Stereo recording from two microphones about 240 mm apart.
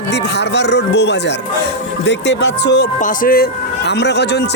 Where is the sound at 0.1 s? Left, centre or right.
Left.